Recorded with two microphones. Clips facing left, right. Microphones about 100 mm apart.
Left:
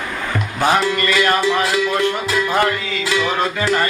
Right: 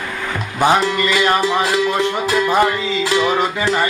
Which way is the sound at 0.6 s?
20° right (ahead or behind).